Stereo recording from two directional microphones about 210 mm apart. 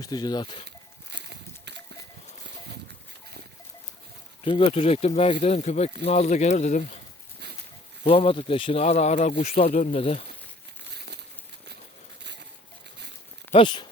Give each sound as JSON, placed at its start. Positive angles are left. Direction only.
{"t": 0.0, "sound": "speech", "side_deg": 20}
{"t": 1.1, "sound": "a sound", "side_deg": -55}
{"t": 4.4, "sound": "speech", "side_deg": 25}
{"t": 8.0, "sound": "speech", "side_deg": 25}
{"t": 10.9, "sound": "crumpling", "side_deg": -50}
{"t": 13.5, "sound": "speech", "side_deg": 25}